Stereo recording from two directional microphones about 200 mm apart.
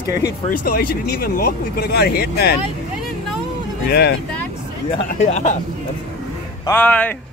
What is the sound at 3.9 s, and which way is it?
Speech, 55° left (ahead or behind).